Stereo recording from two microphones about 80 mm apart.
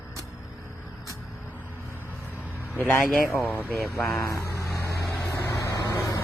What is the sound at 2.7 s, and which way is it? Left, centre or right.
Speech, left.